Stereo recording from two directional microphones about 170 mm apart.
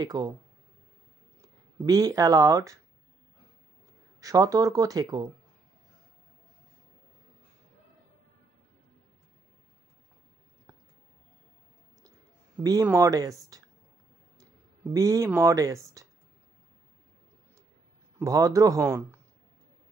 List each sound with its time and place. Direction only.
0.0 s speech: 25° right (ahead or behind)
1.9 s speech: 20° right (ahead or behind)
4.2 s speech: 20° right (ahead or behind)
12.8 s speech: 15° right (ahead or behind)
18.2 s speech: 20° right (ahead or behind)